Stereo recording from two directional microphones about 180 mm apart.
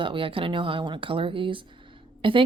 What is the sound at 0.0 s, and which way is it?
Speech, 30° right (ahead or behind).